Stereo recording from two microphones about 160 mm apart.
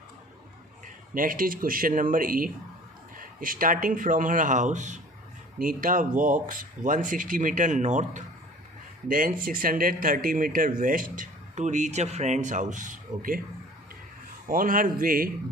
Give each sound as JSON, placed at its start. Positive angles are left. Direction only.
{"t": 1.1, "sound": "speech", "side_deg": -55}
{"t": 5.5, "sound": "speech", "side_deg": -60}
{"t": 14.4, "sound": "speech", "side_deg": -60}